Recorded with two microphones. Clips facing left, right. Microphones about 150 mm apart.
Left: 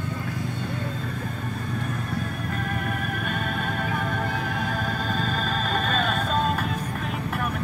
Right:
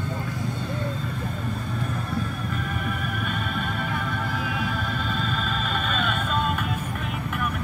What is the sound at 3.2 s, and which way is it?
Music, 45° left (ahead or behind).